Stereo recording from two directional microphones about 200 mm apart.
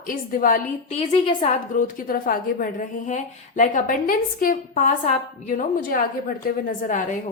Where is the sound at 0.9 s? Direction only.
25° left (ahead or behind).